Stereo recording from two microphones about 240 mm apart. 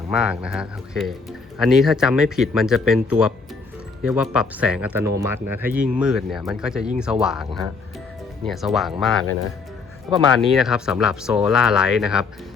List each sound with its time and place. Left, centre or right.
0.1 s speech: centre
8.4 s speech: centre
10.3 s speech: centre